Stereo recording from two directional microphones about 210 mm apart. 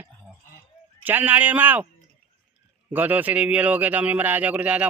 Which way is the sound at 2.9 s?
10° right (ahead or behind).